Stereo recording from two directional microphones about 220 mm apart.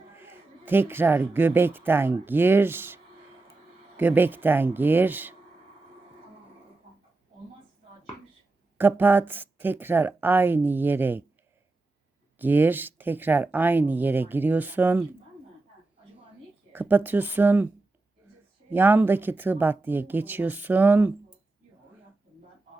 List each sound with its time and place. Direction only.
0.1 s speech: 10° right (ahead or behind)
8.8 s speech: 10° right (ahead or behind)
12.4 s speech: 10° right (ahead or behind)
16.7 s speech: 10° right (ahead or behind)
18.7 s speech: 10° right (ahead or behind)